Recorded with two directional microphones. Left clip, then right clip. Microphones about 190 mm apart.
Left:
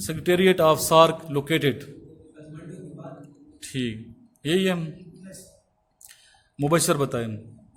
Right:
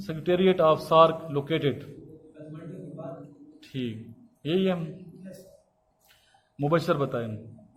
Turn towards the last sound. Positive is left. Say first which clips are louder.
# left 3 dB
turn(degrees=55)  # may be behind; listen again after turning